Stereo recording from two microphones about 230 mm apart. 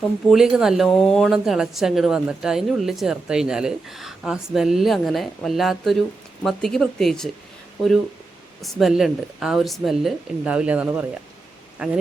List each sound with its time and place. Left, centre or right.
0.3 s speech: centre
8.6 s speech: centre